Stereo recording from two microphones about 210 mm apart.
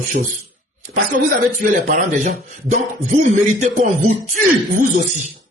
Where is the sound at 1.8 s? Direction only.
40° right (ahead or behind).